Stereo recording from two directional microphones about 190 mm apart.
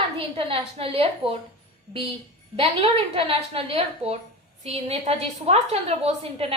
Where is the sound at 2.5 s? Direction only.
30° right (ahead or behind).